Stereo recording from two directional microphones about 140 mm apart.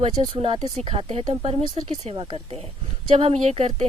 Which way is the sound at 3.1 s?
45° right (ahead or behind).